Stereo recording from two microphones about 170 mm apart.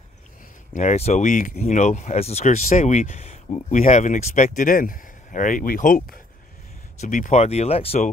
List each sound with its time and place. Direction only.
0.7 s speech: 40° left (ahead or behind)